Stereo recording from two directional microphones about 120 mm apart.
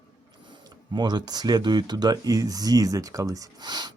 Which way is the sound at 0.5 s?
35° right (ahead or behind).